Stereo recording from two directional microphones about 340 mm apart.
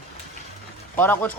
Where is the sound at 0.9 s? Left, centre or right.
Centre.